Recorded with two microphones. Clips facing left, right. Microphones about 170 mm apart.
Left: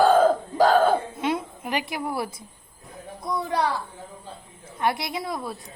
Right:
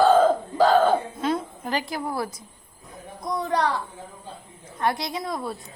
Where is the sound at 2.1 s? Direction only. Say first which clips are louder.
Even; 25° left (ahead or behind).